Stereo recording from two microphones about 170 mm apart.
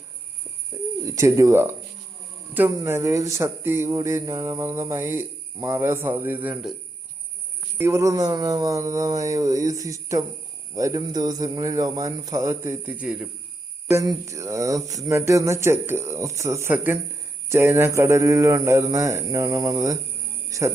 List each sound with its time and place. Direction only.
1.0 s speech: 20° right (ahead or behind)
7.8 s speech: 15° right (ahead or behind)
13.9 s speech: 20° right (ahead or behind)